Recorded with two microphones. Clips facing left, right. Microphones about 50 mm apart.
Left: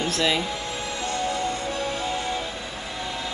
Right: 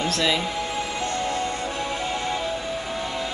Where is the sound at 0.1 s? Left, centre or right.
Centre.